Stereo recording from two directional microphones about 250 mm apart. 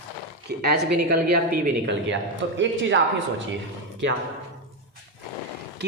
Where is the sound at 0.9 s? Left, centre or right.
Right.